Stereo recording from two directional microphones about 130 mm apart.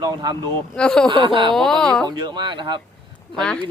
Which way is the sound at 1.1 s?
40° right (ahead or behind).